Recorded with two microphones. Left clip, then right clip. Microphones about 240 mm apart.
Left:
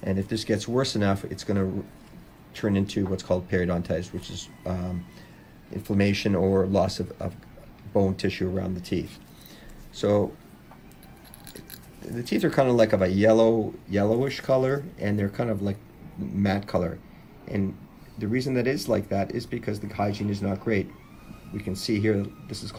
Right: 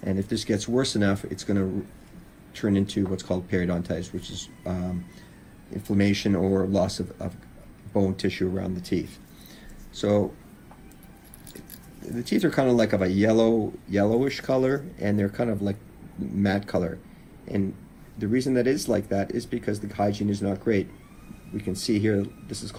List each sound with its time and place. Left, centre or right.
0.0 s speech: left
12.1 s speech: left
18.2 s speech: left
21.8 s speech: left